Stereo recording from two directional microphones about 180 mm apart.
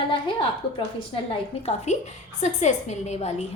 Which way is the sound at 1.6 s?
40° left (ahead or behind).